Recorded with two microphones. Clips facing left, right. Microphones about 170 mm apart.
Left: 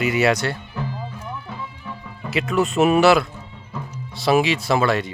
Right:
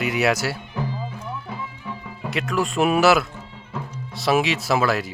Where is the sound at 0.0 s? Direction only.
Centre (ahead or behind).